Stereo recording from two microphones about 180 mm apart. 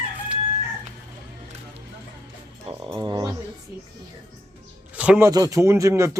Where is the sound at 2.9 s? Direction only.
20° right (ahead or behind).